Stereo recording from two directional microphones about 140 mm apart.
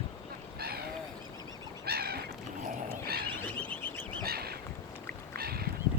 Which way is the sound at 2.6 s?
90° right.